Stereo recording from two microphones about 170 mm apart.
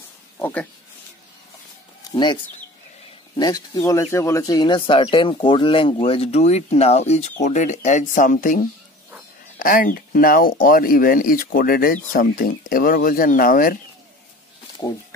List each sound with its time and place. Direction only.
0.4 s speech: 10° left (ahead or behind)
2.0 s a sound: 25° left (ahead or behind)
3.3 s speech: 20° left (ahead or behind); by 13.7 s 55° left (ahead or behind)